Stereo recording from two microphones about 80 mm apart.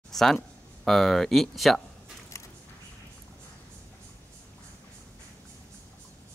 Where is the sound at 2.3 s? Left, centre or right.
Left.